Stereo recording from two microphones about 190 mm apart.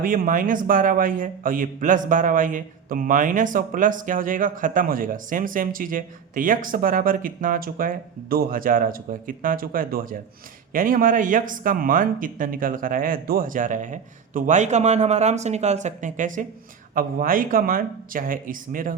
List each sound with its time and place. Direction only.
0.0 s speech: 45° right (ahead or behind)